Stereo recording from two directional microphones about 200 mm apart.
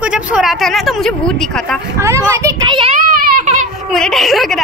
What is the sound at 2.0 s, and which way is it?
Speech, 15° right (ahead or behind).